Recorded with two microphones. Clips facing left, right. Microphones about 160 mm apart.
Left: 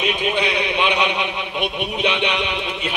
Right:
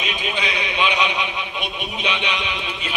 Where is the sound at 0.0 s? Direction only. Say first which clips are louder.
Left 6 dB; 60° left (ahead or behind).